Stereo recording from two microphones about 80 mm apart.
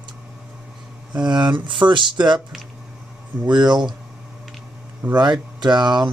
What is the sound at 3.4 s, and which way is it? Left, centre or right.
Speech, right.